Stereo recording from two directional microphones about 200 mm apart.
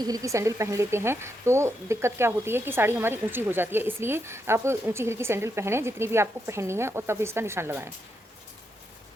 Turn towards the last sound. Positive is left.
turn(degrees=-10)  # may be behind; listen again after turning